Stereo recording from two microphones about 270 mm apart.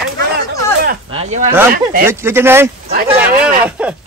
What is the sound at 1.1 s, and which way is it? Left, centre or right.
Speech, right.